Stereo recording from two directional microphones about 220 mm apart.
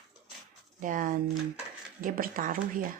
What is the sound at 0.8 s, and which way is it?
Speech, 35° right (ahead or behind).